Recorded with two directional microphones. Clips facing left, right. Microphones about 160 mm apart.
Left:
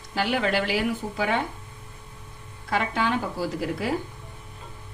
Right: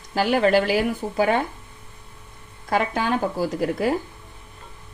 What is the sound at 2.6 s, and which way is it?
A woman's voice, 45° right (ahead or behind).